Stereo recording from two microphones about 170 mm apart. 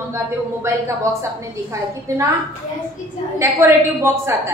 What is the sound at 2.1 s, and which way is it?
Speech, 20° right (ahead or behind).